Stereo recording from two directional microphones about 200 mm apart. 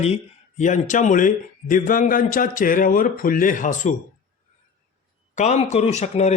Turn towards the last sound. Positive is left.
turn(degrees=35)  # may be behind; listen again after turning